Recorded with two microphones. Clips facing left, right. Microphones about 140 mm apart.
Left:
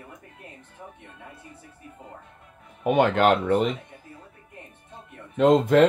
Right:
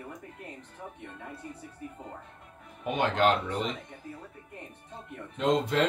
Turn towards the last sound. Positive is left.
turn(degrees=50)  # may be behind; listen again after turning